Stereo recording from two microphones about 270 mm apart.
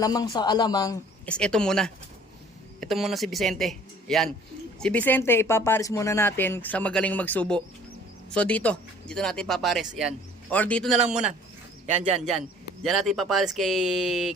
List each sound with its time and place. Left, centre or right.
0.0 s speech: centre
11.9 s speech: right
12.8 s speech: centre